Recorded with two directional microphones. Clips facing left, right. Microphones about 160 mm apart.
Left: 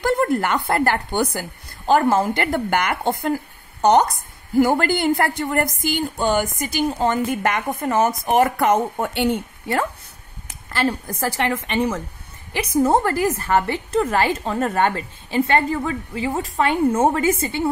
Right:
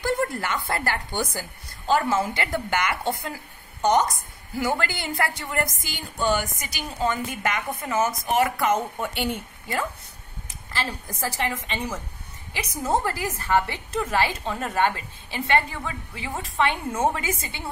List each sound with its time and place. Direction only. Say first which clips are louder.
0.0 s a woman's voice: left 6 dB; 60° left (ahead or behind)
4.6 s a woman's voice: left 9 dB; 50° left (ahead or behind)